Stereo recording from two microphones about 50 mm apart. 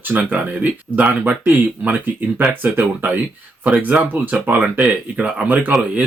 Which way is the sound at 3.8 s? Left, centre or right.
Right.